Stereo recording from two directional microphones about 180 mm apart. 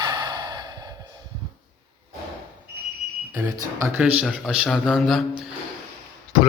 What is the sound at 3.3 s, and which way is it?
Speech, 20° right (ahead or behind).